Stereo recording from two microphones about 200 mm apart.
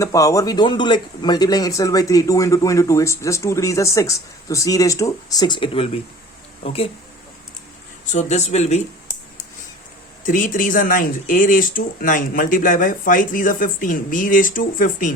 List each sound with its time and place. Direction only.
0.0 s speech: 15° left (ahead or behind)
8.1 s speech: 35° left (ahead or behind)
10.2 s speech: 40° left (ahead or behind)